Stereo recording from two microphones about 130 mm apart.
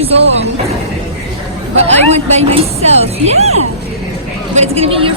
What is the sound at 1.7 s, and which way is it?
A woman's voice, 55° right (ahead or behind).